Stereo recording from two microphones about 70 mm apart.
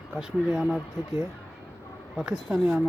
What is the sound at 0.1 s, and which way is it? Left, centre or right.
Speech, centre.